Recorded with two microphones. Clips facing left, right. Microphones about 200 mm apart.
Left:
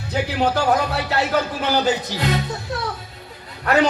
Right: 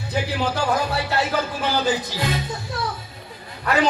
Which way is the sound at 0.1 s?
65° left (ahead or behind).